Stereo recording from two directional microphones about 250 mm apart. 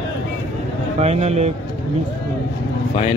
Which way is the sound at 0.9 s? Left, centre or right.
Right.